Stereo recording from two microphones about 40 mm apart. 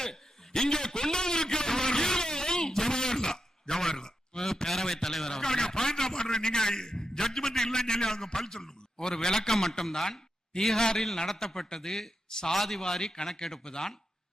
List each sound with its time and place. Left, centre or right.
0.0 s a sound: centre
10.8 s a man's voice: centre
12.8 s a man's voice: centre